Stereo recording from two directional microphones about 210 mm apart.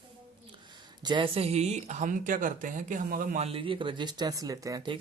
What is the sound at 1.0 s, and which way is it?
Speech, 25° right (ahead or behind).